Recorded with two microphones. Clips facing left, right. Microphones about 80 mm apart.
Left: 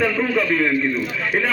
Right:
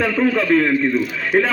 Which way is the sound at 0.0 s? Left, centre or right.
Centre.